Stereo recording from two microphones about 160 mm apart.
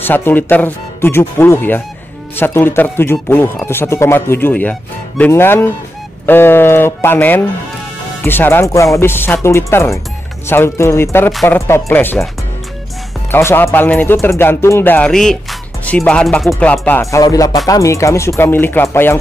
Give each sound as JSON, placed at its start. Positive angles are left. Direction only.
{"t": 0.0, "sound": "speech", "side_deg": 10}
{"t": 13.3, "sound": "speech", "side_deg": 15}